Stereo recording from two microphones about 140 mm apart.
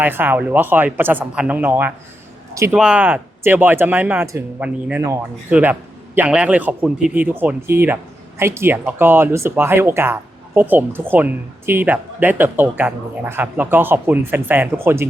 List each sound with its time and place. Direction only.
0.0 s speech: 15° right (ahead or behind)